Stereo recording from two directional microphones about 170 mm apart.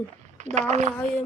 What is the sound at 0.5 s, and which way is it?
Speech, 45° right (ahead or behind).